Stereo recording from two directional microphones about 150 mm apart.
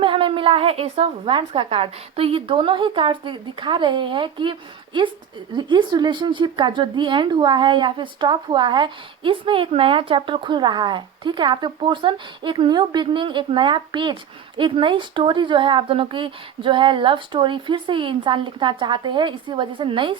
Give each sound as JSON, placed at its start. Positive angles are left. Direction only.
{"t": 0.0, "sound": "speech", "side_deg": -35}